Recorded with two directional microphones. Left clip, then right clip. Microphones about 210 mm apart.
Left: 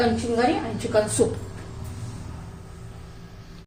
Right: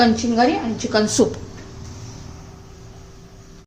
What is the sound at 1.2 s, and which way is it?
Speech, 55° right (ahead or behind).